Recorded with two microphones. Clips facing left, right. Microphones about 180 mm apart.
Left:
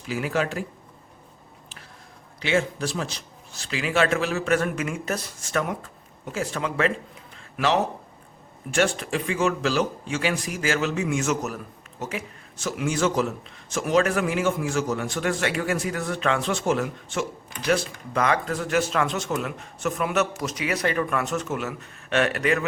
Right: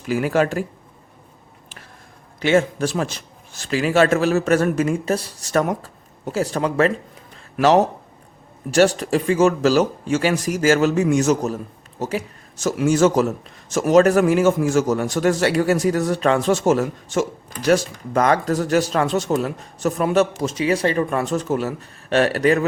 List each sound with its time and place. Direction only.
0.1 s speech: 45° right (ahead or behind)
2.4 s speech: 50° right (ahead or behind)